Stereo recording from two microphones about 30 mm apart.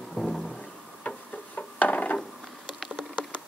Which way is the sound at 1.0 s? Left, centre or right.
Left.